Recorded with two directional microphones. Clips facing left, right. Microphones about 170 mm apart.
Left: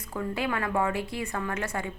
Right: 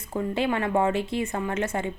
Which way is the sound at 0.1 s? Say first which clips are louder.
Right 4 dB; 25° right (ahead or behind).